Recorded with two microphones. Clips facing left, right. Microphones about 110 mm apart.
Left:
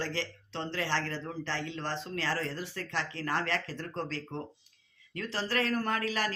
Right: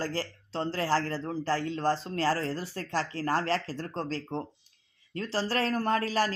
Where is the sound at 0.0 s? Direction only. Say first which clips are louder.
Right 2 dB; 40° right (ahead or behind).